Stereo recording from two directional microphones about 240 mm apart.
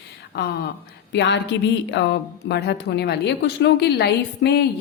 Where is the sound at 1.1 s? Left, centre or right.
Left.